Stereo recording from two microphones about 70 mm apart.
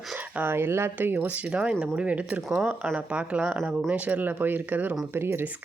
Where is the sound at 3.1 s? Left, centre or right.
Centre; by 5.4 s right.